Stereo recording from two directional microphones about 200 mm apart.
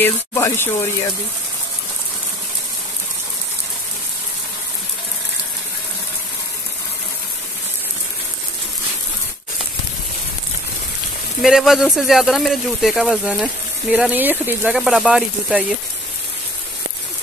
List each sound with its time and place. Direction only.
0.0 s speech: 10° left (ahead or behind)
11.4 s speech: centre (ahead or behind)